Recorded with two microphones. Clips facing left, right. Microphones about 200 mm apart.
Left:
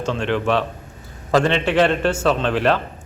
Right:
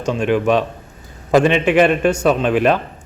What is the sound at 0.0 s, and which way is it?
A man's voice, 15° right (ahead or behind).